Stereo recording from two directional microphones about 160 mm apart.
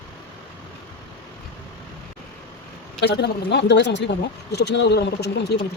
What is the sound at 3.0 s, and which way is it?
A woman's voice, 90° left.